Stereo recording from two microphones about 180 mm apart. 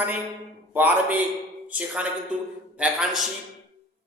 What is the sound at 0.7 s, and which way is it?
A man's voice, 10° right (ahead or behind).